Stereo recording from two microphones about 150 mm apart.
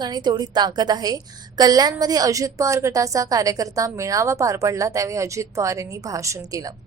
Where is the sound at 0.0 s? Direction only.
30° right (ahead or behind).